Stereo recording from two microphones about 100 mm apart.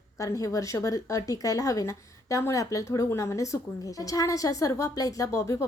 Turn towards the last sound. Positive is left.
turn(degrees=30)  # may be behind; listen again after turning